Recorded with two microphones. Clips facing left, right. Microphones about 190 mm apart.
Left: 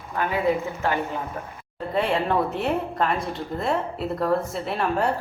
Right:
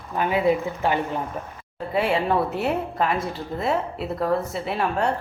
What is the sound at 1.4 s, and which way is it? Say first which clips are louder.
Speech: right 1 dB; 15° right (ahead or behind).